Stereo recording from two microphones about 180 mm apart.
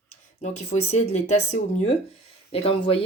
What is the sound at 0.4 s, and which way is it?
Speech, 40° left (ahead or behind).